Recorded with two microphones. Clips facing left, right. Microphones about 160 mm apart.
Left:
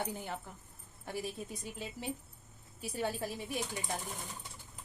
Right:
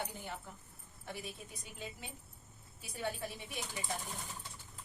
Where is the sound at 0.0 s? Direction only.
50° left (ahead or behind).